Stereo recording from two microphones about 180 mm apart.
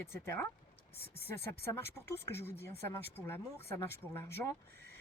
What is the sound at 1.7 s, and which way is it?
Speech, 15° left (ahead or behind).